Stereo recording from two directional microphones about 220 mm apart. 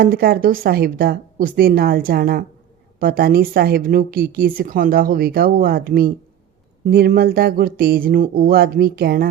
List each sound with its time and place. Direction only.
0.0 s a woman's voice: 45° right (ahead or behind)